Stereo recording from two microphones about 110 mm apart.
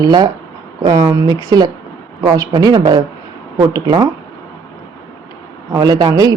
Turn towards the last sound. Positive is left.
turn(degrees=-30)  # may be behind; listen again after turning